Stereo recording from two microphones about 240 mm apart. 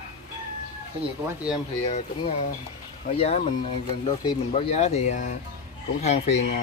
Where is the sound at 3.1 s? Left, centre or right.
Left.